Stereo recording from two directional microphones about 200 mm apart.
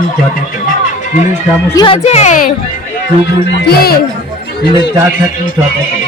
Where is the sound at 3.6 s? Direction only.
50° left (ahead or behind).